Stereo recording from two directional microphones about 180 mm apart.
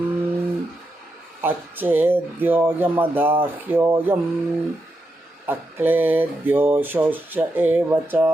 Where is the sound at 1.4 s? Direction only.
10° right (ahead or behind).